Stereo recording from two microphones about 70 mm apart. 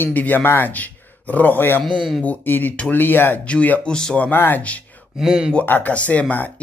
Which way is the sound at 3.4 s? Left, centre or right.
Centre.